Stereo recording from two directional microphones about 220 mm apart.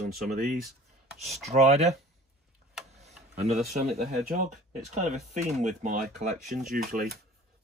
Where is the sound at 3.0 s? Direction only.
30° right (ahead or behind).